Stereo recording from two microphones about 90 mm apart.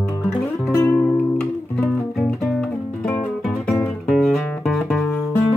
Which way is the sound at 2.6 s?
10° left (ahead or behind).